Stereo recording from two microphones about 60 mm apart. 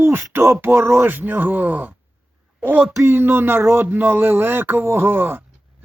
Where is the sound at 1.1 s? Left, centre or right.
Right.